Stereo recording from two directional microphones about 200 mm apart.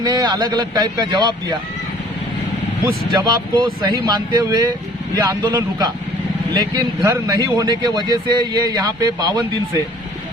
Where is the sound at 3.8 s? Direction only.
20° right (ahead or behind).